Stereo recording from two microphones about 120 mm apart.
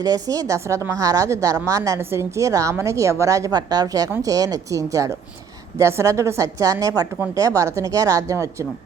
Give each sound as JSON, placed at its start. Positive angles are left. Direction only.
{"t": 0.0, "sound": "speech", "side_deg": -30}